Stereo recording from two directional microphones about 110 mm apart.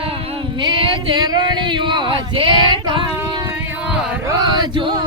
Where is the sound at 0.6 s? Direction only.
50° right (ahead or behind).